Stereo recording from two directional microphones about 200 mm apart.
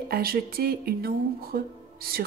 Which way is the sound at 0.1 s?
50° right (ahead or behind).